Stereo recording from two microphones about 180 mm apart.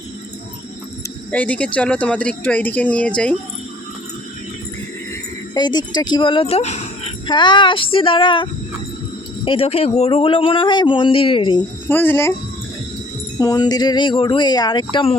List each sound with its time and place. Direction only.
1.3 s speech: 10° left (ahead or behind)
5.5 s a man's voice: 25° left (ahead or behind)
7.3 s a man's voice: 25° left (ahead or behind)
11.9 s speech: 10° left (ahead or behind)
13.4 s a man's voice: 20° left (ahead or behind)